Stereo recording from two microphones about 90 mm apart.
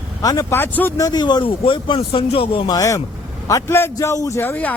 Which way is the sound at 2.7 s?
35° left (ahead or behind).